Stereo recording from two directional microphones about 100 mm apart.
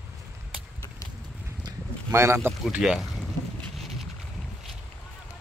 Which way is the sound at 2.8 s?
Centre (ahead or behind).